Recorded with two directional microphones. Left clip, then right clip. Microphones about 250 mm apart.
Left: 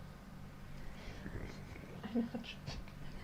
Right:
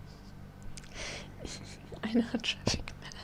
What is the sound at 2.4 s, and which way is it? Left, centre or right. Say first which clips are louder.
Speech: right 16 dB; right.